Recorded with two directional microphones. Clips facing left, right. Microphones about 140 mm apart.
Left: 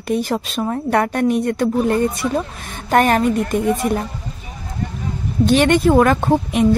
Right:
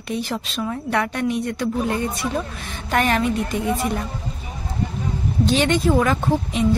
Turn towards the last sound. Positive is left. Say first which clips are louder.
# left 5 dB
turn(degrees=60)  # may be behind; listen again after turning